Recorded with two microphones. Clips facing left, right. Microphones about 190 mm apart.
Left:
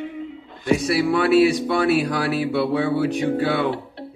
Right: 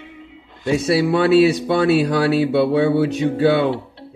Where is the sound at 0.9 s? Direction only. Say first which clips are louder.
Right 5 dB; 25° right (ahead or behind).